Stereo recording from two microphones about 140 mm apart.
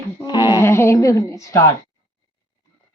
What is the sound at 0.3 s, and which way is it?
Speech, 30° left (ahead or behind).